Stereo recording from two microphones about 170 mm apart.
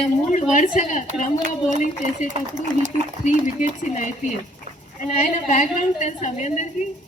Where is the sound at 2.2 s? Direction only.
45° right (ahead or behind).